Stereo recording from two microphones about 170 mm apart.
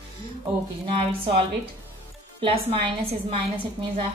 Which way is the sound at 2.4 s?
35° right (ahead or behind).